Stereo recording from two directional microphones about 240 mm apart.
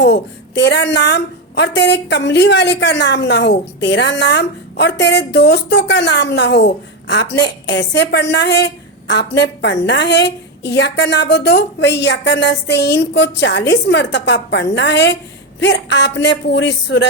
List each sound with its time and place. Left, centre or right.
0.0 s a woman's voice: left